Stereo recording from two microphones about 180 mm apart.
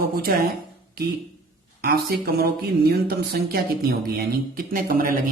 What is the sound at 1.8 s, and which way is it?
Speech, 60° right (ahead or behind).